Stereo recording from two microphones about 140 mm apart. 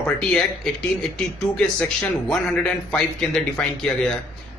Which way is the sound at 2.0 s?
5° left (ahead or behind).